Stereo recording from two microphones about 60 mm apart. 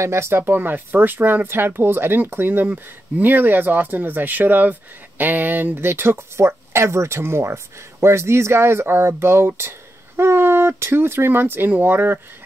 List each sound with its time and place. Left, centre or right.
0.0 s speech: right